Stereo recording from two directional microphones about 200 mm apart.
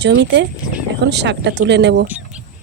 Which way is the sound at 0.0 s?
60° right (ahead or behind).